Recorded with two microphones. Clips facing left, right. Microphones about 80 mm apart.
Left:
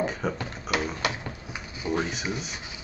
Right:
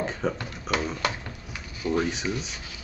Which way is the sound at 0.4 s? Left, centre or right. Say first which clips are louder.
Even; left.